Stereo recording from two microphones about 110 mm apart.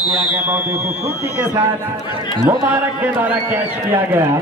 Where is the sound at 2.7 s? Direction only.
15° right (ahead or behind).